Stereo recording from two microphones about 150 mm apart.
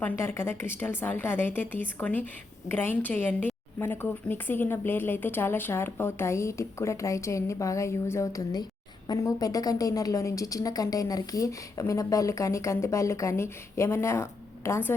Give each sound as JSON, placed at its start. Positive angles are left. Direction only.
{"t": 0.0, "sound": "a woman's voice", "side_deg": 15}